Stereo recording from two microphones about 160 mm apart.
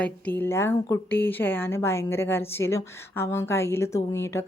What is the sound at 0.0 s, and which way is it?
A woman's voice, 10° left (ahead or behind).